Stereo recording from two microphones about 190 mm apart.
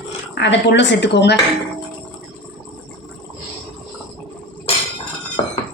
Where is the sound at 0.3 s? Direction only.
70° left (ahead or behind).